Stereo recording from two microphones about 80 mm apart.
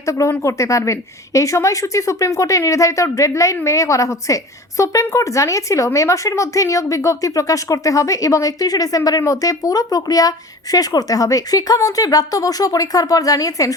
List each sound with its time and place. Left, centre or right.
0.0 s a woman's voice: left